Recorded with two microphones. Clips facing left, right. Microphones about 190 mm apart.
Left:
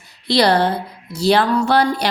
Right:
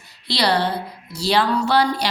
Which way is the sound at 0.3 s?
50° left (ahead or behind).